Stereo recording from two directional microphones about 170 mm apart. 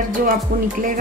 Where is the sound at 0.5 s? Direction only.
55° right (ahead or behind).